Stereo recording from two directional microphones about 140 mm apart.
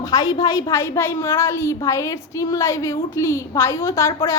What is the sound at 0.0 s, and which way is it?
A woman's voice, 25° left (ahead or behind).